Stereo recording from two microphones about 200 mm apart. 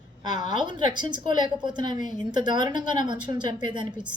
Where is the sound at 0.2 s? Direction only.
20° right (ahead or behind).